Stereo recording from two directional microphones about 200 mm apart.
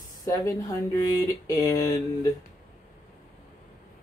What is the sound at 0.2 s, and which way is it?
Speech, 15° left (ahead or behind).